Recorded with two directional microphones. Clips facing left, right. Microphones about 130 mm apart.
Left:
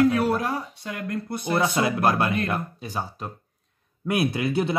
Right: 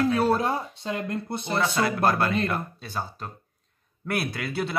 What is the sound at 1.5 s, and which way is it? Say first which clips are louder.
Speech: left 2 dB; 20° left (ahead or behind).